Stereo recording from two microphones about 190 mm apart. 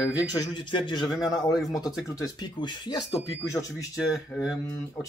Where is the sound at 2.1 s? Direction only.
20° left (ahead or behind).